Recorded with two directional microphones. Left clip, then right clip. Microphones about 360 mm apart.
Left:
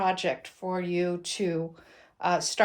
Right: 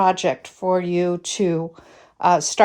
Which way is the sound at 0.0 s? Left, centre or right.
Centre.